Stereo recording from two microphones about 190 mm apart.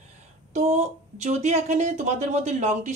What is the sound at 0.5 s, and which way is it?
A woman's voice, 35° right (ahead or behind).